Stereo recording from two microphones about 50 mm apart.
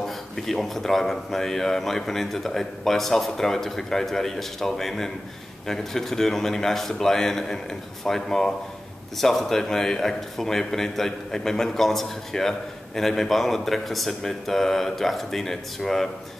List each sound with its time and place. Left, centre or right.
0.0 s a man's voice: centre